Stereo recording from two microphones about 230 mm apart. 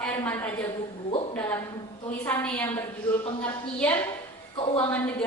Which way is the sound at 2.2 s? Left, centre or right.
Centre.